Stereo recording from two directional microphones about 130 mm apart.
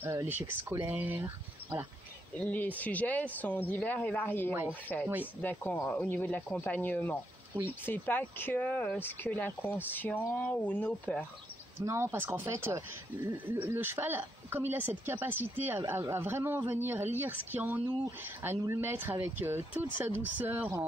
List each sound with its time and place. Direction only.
0.0 s a man's voice: 15° right (ahead or behind)
2.3 s speech: 10° left (ahead or behind)
5.0 s a man's voice: 10° right (ahead or behind)
5.4 s speech: 15° left (ahead or behind)
11.8 s a man's voice: 20° right (ahead or behind)